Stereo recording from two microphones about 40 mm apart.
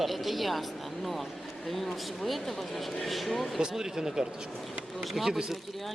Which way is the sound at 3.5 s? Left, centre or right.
Centre.